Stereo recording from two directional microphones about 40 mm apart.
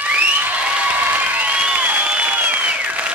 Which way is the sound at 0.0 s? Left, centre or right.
Right.